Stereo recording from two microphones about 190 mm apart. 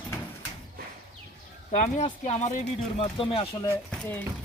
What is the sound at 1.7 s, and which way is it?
Speech, 40° left (ahead or behind).